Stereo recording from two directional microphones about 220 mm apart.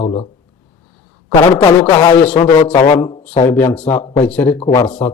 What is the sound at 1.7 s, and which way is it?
Speech, 5° left (ahead or behind).